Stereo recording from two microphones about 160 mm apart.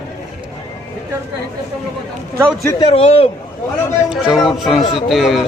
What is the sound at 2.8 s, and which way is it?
Speech, 40° left (ahead or behind).